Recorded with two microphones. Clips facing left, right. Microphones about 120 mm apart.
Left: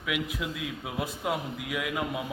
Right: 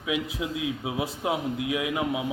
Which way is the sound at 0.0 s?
25° right (ahead or behind).